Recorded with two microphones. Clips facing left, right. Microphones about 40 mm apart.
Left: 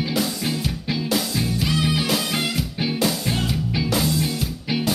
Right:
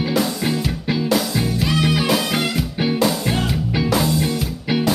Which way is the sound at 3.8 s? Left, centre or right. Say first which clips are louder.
Right 4 dB; centre.